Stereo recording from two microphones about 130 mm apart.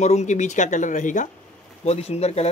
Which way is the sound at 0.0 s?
65° left (ahead or behind).